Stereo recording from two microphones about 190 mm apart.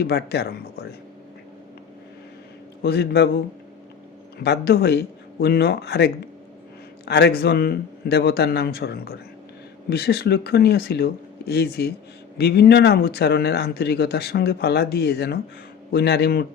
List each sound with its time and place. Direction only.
0.0 s speech: 60° left (ahead or behind)
2.8 s speech: 60° left (ahead or behind)
4.4 s speech: 60° left (ahead or behind)